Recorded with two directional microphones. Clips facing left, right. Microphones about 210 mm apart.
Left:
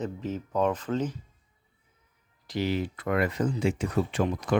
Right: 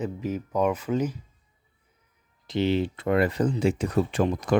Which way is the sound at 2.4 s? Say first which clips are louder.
Right 4 dB; 25° right (ahead or behind).